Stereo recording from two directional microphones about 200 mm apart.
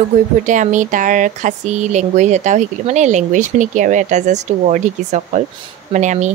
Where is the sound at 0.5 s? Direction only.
40° right (ahead or behind).